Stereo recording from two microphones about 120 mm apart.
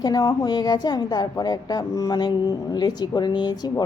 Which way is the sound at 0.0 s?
35° left (ahead or behind).